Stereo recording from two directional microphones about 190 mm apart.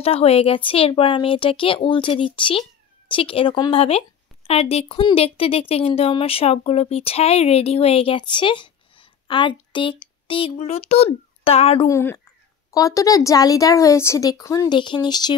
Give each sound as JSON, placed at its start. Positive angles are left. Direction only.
{"t": 0.0, "sound": "a woman's voice", "side_deg": 30}
{"t": 11.9, "sound": "speech", "side_deg": 10}